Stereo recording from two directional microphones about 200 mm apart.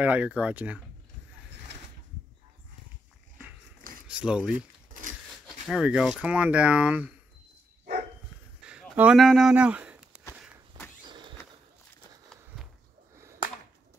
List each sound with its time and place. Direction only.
0.0 s speech: 5° right (ahead or behind)
4.1 s speech: 5° right (ahead or behind)
8.6 s a sound: 5° right (ahead or behind)
10.8 s vehicle: 20° right (ahead or behind)
11.1 s a sound: 25° right (ahead or behind)
13.1 s whip: 15° right (ahead or behind)